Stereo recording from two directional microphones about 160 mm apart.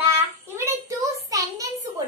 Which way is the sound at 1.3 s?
20° right (ahead or behind).